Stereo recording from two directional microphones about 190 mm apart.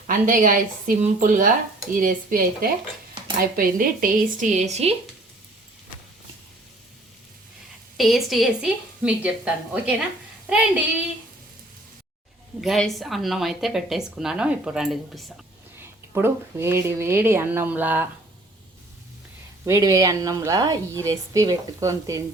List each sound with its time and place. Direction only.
0.1 s a woman's voice: 45° right (ahead or behind)
7.9 s speech: centre (ahead or behind)
12.6 s speech: centre (ahead or behind)
15.8 s a woman's voice: 15° right (ahead or behind)
19.6 s a woman's voice: 15° right (ahead or behind)